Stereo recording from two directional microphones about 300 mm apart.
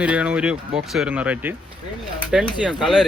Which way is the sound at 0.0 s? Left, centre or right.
Centre.